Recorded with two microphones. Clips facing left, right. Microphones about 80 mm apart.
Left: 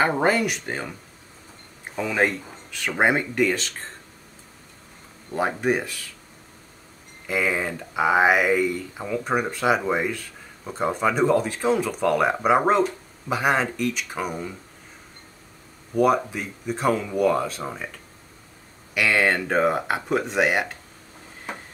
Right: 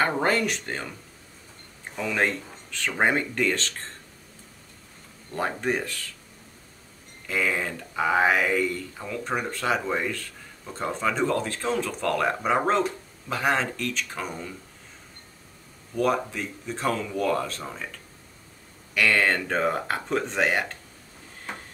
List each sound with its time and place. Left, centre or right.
0.0 s speech: centre
2.0 s speech: centre
5.3 s speech: centre
7.2 s speech: centre
15.9 s speech: centre
18.9 s speech: centre